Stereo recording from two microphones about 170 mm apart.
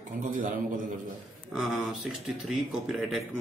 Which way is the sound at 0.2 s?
50° right (ahead or behind).